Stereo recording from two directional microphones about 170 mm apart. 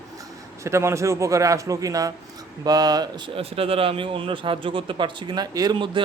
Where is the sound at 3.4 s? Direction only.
35° right (ahead or behind).